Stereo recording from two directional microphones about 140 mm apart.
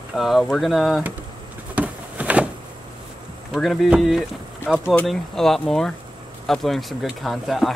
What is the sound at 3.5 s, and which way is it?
Speech, centre (ahead or behind).